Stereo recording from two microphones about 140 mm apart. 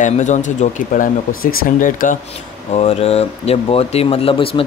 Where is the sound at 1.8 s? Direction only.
75° left (ahead or behind).